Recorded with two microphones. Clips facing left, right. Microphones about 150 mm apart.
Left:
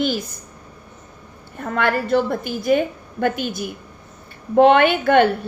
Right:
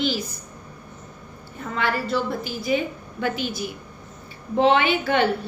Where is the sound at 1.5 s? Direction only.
55° left (ahead or behind).